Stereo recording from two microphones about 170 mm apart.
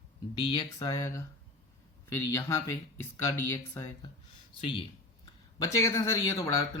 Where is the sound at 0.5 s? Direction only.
30° left (ahead or behind).